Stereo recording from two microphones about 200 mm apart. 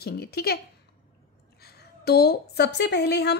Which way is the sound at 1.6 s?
50° left (ahead or behind).